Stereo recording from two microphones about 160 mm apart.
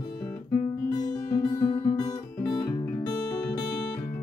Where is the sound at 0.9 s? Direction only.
25° left (ahead or behind).